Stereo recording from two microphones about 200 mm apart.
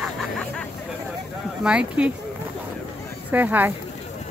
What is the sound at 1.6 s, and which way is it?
Speech, 5° right (ahead or behind).